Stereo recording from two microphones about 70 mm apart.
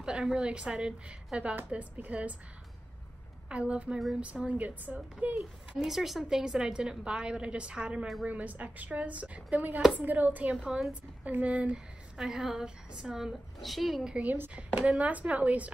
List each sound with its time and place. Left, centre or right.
0.0 s a woman's voice: centre
3.4 s a woman's voice: centre
5.8 s a woman's voice: centre; by 11.7 s right
11.7 s a woman's voice: centre
14.1 s speech: right